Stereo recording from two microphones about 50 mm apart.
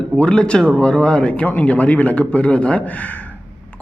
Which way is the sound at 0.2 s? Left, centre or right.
Left.